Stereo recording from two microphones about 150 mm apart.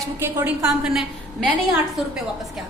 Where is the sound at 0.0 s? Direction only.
15° right (ahead or behind).